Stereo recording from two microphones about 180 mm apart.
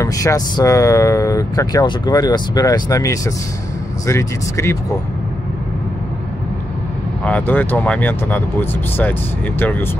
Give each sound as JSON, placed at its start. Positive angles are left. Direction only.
{"t": 0.0, "sound": "speech", "side_deg": 20}
{"t": 7.2, "sound": "speech", "side_deg": 10}